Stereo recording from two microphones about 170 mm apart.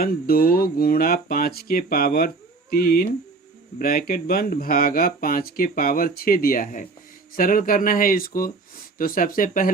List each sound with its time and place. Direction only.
0.0 s speech: 60° left (ahead or behind)